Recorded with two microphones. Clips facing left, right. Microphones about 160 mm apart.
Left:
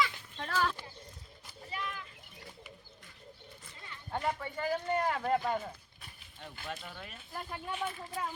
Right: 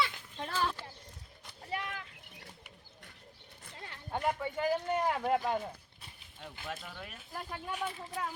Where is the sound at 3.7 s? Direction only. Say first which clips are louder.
Right 5 dB; 65° right (ahead or behind).